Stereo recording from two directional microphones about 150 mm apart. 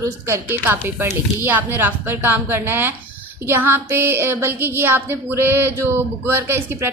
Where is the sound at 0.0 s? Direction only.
20° right (ahead or behind).